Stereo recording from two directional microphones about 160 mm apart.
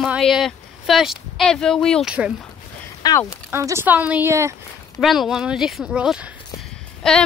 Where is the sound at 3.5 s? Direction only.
15° right (ahead or behind).